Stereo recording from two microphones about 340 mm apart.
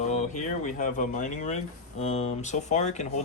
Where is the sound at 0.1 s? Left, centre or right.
Left.